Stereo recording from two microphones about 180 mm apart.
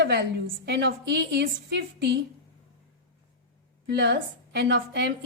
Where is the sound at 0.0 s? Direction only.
70° right (ahead or behind).